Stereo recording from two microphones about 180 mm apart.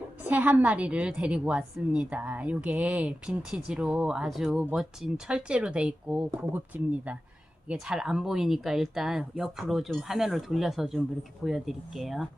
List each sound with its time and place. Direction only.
0.3 s a woman's voice: 10° right (ahead or behind)